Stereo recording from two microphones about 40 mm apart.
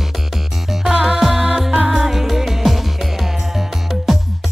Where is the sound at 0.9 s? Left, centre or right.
Centre.